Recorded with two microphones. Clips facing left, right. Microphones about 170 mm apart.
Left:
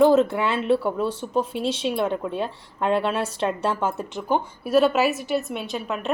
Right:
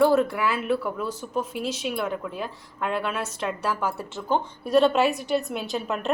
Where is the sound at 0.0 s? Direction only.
20° left (ahead or behind).